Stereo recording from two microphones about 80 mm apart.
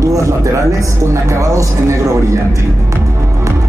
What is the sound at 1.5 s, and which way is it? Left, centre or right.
Speech, right.